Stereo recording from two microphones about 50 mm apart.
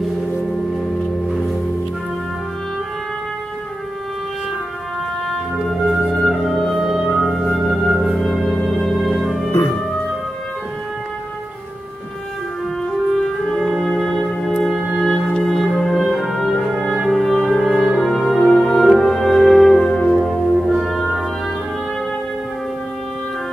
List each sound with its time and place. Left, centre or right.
5.8 s music: centre
9.5 s music: left
13.5 s music: centre
20.5 s music: centre